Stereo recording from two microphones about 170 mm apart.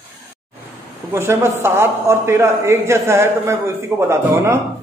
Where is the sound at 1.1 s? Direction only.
15° right (ahead or behind).